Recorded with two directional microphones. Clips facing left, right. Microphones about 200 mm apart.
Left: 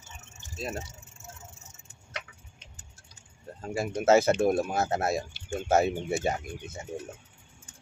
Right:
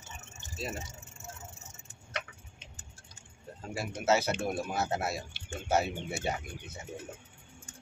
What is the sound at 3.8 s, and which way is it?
Speech, 50° left (ahead or behind).